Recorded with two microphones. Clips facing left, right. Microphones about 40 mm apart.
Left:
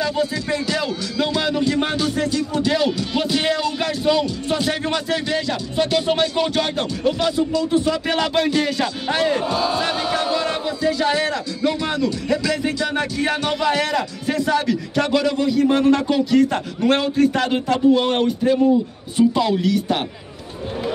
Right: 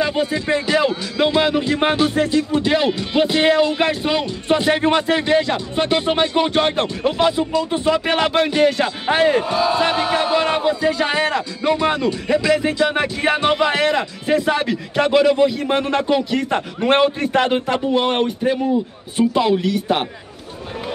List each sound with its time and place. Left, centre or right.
0.0 s speech: right
9.4 s speech: centre